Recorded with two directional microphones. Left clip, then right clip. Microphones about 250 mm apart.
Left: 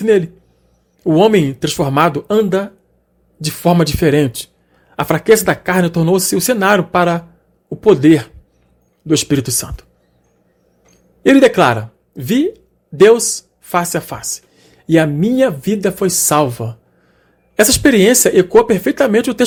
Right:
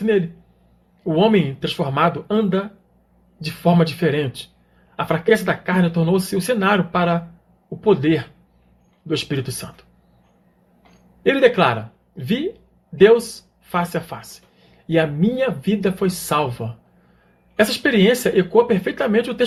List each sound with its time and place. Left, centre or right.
1.0 s speech: left
10.9 s speech: left